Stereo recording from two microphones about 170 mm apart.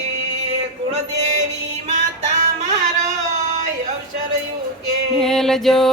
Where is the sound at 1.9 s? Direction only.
40° right (ahead or behind).